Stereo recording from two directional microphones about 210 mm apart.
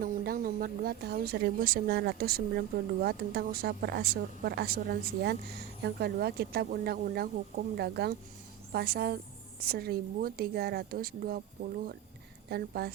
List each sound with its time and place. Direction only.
0.0 s a woman's voice: 45° right (ahead or behind)
12.5 s a woman's voice: 50° right (ahead or behind)